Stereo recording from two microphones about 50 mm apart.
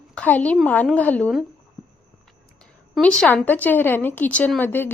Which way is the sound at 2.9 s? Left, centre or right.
Centre.